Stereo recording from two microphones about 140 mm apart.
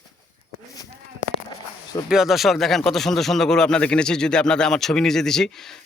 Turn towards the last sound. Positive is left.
turn(degrees=5)  # may be behind; listen again after turning